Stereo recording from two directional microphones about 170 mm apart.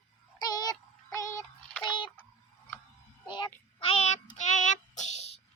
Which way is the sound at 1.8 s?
30° left (ahead or behind).